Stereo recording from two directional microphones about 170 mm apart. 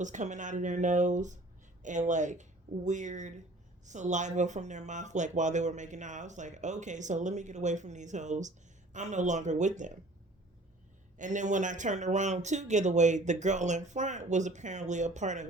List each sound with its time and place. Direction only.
0.0 s speech: 45° right (ahead or behind)
11.2 s speech: 45° right (ahead or behind)